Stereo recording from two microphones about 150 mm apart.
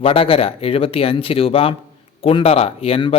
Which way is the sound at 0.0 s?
40° left (ahead or behind).